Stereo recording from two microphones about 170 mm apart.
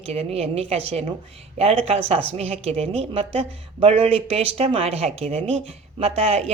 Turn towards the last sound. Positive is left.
turn(degrees=-35)  # may be behind; listen again after turning